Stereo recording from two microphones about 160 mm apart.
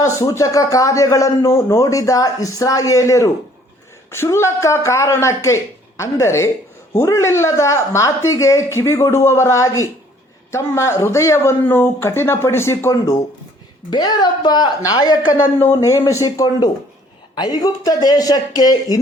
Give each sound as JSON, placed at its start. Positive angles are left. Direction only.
{"t": 0.0, "sound": "a man's voice", "side_deg": 20}